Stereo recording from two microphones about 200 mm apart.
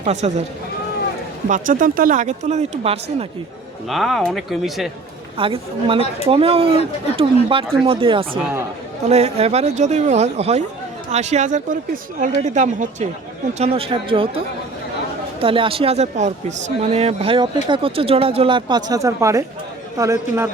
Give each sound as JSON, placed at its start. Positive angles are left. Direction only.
{"t": 0.0, "sound": "speech", "side_deg": -35}
{"t": 1.5, "sound": "speech", "side_deg": -40}
{"t": 3.8, "sound": "speech", "side_deg": 0}
{"t": 5.4, "sound": "a man's voice", "side_deg": -25}